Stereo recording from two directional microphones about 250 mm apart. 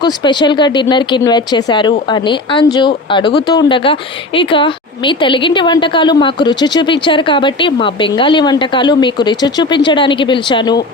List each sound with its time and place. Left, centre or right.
0.0 s speech: centre